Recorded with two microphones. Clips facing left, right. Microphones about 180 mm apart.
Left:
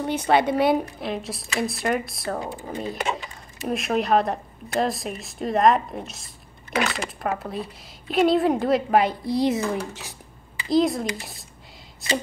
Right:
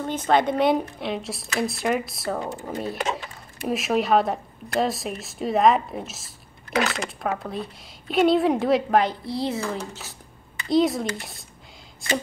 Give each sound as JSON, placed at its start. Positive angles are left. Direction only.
{"t": 0.0, "sound": "a woman's voice", "side_deg": 10}
{"t": 2.4, "sound": "speech", "side_deg": 10}
{"t": 2.7, "sound": "a woman's voice", "side_deg": 0}
{"t": 9.2, "sound": "speech", "side_deg": 20}
{"t": 10.7, "sound": "a woman's voice", "side_deg": 0}